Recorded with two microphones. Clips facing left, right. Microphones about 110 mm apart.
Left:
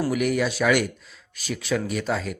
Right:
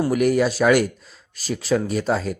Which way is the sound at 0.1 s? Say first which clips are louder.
Right 5 dB; 40° right (ahead or behind).